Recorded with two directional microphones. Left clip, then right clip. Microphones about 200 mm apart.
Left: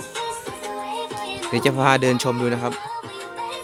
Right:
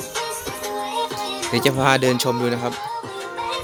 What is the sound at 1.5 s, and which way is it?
Speech, 10° left (ahead or behind).